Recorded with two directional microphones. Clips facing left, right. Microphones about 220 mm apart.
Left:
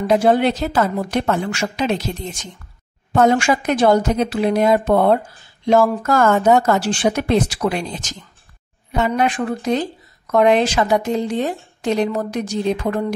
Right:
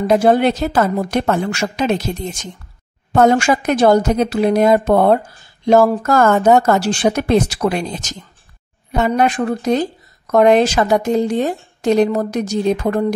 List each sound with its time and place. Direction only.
0.0 s speech: 45° right (ahead or behind)
3.2 s speech: 40° right (ahead or behind)